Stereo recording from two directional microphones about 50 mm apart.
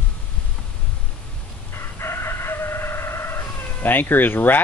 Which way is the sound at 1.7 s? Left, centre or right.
Left.